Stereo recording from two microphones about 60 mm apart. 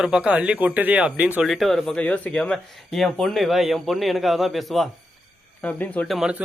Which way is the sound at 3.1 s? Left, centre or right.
Centre.